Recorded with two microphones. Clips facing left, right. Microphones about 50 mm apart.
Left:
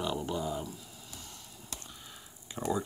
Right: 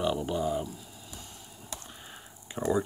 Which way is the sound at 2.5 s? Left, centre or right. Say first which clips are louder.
Right 4 dB; right.